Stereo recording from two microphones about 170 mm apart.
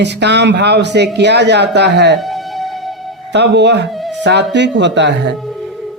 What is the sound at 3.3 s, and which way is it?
Speech, 90° right.